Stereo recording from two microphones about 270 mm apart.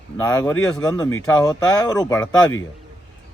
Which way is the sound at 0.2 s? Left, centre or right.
Centre.